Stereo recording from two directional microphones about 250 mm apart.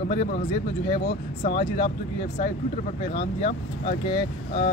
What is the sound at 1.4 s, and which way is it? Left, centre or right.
Speech, left.